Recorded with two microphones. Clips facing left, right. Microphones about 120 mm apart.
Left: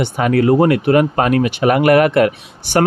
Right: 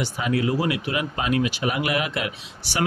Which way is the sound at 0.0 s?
60° left (ahead or behind).